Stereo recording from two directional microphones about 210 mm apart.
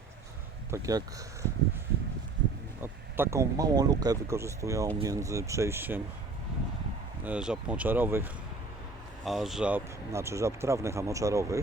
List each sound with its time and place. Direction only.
0.7 s speech: 15° right (ahead or behind)
2.8 s speech: 10° right (ahead or behind)
7.3 s speech: 5° right (ahead or behind)